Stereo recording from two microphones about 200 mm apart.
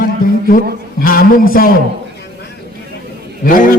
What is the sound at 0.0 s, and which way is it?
Music, 45° left (ahead or behind).